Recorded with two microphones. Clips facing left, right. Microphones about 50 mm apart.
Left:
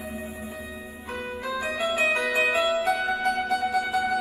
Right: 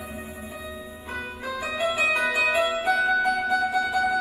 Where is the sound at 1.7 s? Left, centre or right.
Right.